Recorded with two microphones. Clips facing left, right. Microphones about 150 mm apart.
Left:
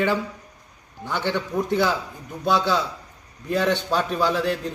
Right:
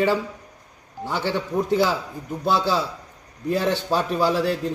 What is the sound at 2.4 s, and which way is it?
Speech, 30° right (ahead or behind).